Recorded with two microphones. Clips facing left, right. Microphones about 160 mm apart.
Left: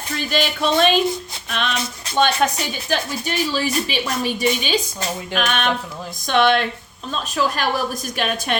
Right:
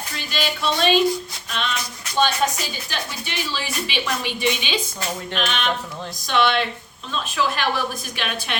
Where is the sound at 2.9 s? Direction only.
45° left (ahead or behind).